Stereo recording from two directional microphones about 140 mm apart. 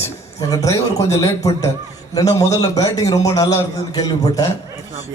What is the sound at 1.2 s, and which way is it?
A man's voice, 25° left (ahead or behind).